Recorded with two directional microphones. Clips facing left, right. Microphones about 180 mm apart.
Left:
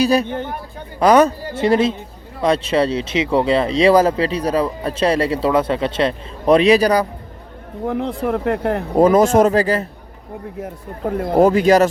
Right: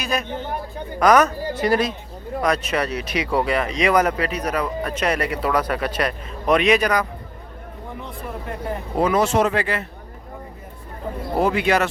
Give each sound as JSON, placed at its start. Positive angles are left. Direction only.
{"t": 0.0, "sound": "speech", "side_deg": 35}
{"t": 7.9, "sound": "speech", "side_deg": 85}
{"t": 9.0, "sound": "speech", "side_deg": 45}
{"t": 10.6, "sound": "speech", "side_deg": 75}
{"t": 11.3, "sound": "speech", "side_deg": 40}